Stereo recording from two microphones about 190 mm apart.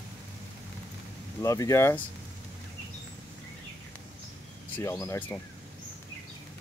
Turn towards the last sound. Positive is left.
turn(degrees=15)  # may be behind; listen again after turning